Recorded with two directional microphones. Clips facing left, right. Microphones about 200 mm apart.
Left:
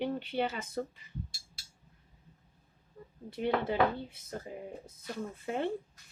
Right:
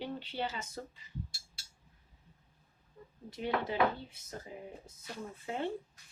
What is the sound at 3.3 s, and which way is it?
A woman's voice, 55° left (ahead or behind).